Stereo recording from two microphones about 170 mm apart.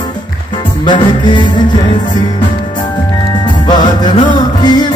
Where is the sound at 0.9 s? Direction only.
25° left (ahead or behind).